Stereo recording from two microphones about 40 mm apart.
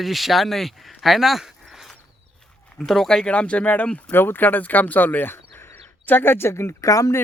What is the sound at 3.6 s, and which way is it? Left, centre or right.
Speech, left.